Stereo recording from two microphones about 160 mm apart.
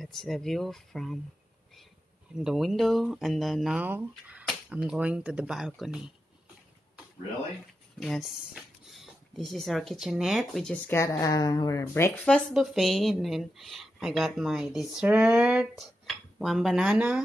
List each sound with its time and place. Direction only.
0.0 s a woman's voice: centre (ahead or behind)
2.4 s a woman's voice: centre (ahead or behind)
8.0 s a woman's voice: centre (ahead or behind)
10.9 s speech: 20° left (ahead or behind)
12.3 s a woman's voice: 5° left (ahead or behind)